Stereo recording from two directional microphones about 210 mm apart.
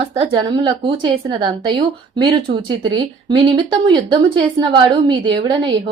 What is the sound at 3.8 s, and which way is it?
Speech, 20° right (ahead or behind).